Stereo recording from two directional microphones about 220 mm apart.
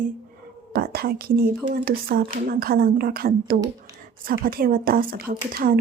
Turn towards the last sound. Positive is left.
turn(degrees=-40)  # may be behind; listen again after turning